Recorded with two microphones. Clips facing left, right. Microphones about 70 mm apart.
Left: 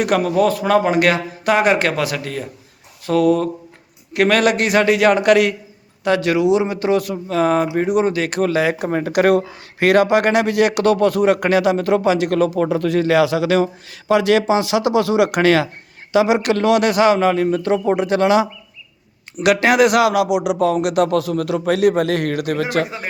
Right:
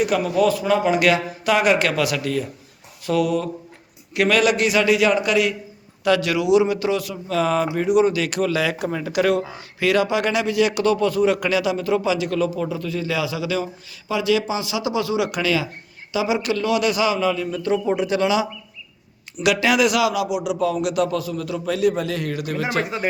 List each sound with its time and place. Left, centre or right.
0.0 s a man's voice: left
6.1 s a man's voice: left